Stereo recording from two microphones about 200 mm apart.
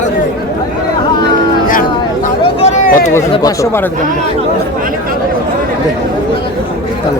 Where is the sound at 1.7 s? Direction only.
45° left (ahead or behind).